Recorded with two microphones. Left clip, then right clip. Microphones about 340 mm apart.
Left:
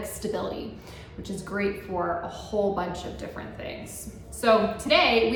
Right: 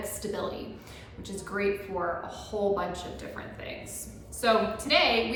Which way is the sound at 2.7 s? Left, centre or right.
Centre.